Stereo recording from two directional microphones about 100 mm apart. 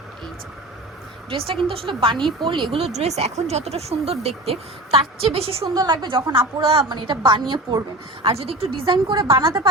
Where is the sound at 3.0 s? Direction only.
90° right.